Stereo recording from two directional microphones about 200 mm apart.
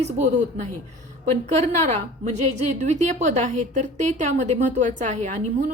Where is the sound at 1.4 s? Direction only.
35° right (ahead or behind).